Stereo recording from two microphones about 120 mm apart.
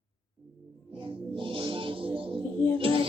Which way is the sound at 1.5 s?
45° right (ahead or behind).